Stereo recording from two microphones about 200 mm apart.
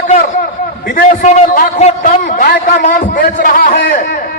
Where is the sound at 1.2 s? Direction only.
35° left (ahead or behind).